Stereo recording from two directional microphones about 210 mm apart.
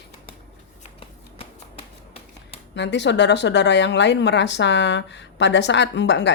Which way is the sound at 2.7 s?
55° left (ahead or behind).